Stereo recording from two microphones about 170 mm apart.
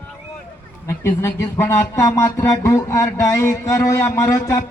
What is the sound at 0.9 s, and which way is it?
Speech, 15° left (ahead or behind).